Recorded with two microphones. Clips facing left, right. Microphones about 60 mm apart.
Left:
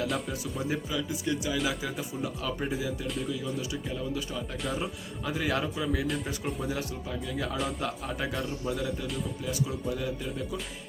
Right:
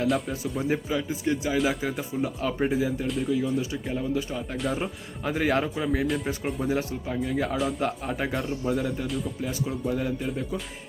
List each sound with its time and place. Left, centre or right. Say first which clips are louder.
0.1 s speech: right 5 dB; centre
0.7 s speech: right 5 dB; right
3.2 s speech: right 7 dB; right
3.8 s speech: right 5 dB; right
4.5 s speech: right 5 dB; centre
5.2 s speech: right 5 dB; right
6.1 s speech: right 4 dB; centre
6.7 s speech: right 6 dB; right
7.5 s speech: right 5 dB; centre
7.8 s speech: right 5 dB; right
9.0 s speech: right 4 dB; centre
9.9 s speech: right 5 dB; right